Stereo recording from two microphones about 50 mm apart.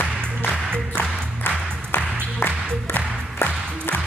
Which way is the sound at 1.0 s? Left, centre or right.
Left.